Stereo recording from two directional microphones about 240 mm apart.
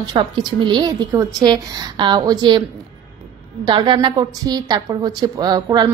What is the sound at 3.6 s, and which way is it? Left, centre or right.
A woman's voice, centre.